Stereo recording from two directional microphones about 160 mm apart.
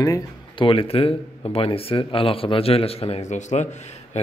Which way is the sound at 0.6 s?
35° left (ahead or behind).